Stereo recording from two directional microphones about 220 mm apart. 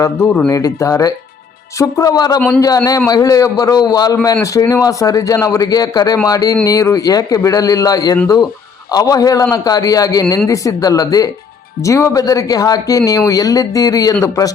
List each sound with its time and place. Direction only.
0.0 s a man's voice: 10° left (ahead or behind)